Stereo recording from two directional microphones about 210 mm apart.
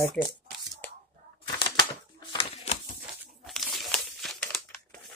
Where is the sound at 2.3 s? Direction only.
25° left (ahead or behind).